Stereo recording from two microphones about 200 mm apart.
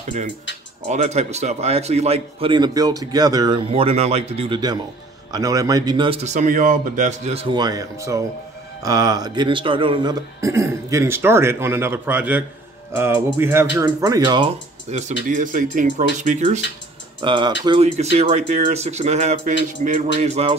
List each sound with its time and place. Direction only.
0.8 s a man's voice: 35° right (ahead or behind)
14.9 s speech: 35° right (ahead or behind)
17.2 s a man's voice: 25° right (ahead or behind)